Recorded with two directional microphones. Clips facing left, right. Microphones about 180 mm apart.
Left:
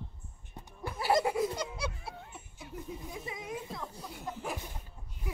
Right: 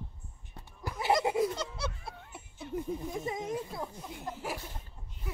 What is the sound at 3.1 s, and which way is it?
Speech, 45° right (ahead or behind).